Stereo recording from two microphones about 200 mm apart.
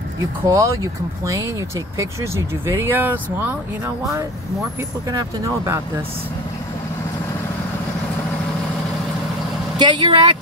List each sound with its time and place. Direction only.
0.5 s speech: 15° right (ahead or behind)
9.8 s speech: 25° right (ahead or behind)